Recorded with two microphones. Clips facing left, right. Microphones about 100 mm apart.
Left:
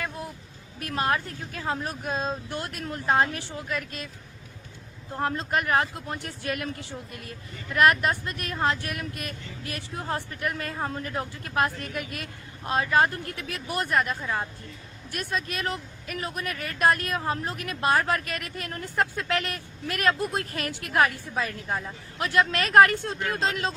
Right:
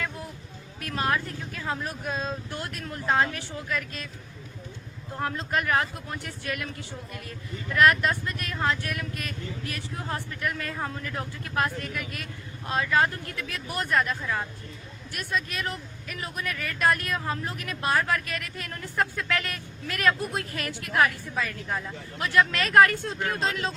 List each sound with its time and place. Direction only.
0.8 s speech: 30° left (ahead or behind)
5.2 s a woman's voice: 30° left (ahead or behind)